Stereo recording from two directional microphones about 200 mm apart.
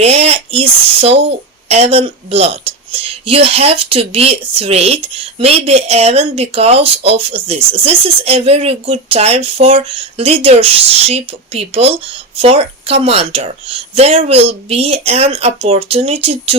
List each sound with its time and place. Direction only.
0.0 s speech: 30° right (ahead or behind)